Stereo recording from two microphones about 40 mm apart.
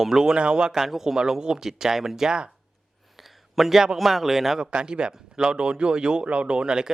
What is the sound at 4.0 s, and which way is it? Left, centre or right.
Speech, centre.